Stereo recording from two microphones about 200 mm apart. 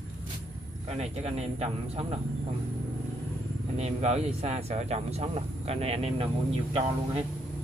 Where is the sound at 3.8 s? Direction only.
35° right (ahead or behind).